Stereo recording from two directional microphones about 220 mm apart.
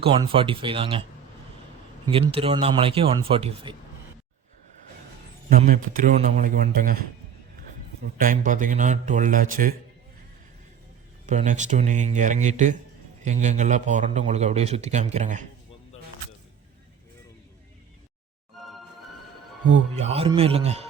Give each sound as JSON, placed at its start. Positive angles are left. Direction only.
{"t": 0.0, "sound": "speech", "side_deg": -25}
{"t": 2.0, "sound": "speech", "side_deg": -25}
{"t": 5.5, "sound": "a man's voice", "side_deg": -40}
{"t": 8.2, "sound": "a man's voice", "side_deg": -35}
{"t": 11.3, "sound": "a man's voice", "side_deg": -35}
{"t": 18.5, "sound": "music", "side_deg": 0}
{"t": 19.7, "sound": "speech", "side_deg": -30}